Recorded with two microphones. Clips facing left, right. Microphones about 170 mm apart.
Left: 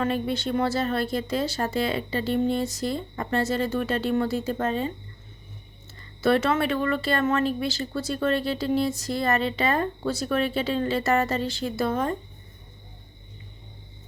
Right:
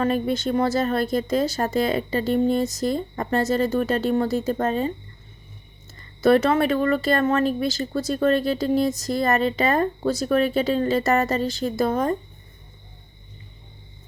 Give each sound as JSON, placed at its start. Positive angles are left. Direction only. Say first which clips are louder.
{"t": 0.0, "sound": "speech", "louder": "right 4 dB", "side_deg": -45}
{"t": 6.2, "sound": "speech", "louder": "right 4 dB", "side_deg": -40}